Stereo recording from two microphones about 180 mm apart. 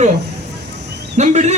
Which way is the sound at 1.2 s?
40° right (ahead or behind).